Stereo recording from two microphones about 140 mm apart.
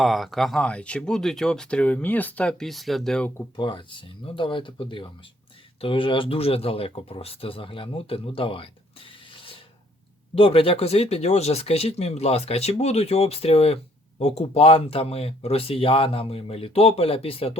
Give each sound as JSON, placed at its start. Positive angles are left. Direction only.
{"t": 0.0, "sound": "speech", "side_deg": 0}
{"t": 3.5, "sound": "speech", "side_deg": 35}